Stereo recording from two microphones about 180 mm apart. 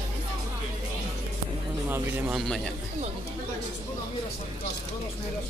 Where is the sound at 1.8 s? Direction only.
10° right (ahead or behind).